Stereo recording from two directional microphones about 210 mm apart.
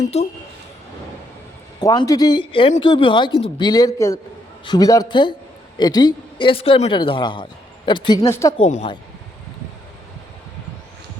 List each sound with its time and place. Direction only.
0.1 s speech: 30° left (ahead or behind)
1.8 s a woman's voice: 15° left (ahead or behind)
8.5 s speech: 30° left (ahead or behind)